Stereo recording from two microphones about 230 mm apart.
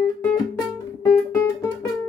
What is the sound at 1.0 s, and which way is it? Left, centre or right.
Guitar, centre.